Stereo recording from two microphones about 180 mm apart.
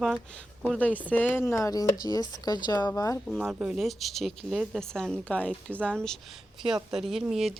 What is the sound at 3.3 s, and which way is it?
A woman's voice, centre (ahead or behind).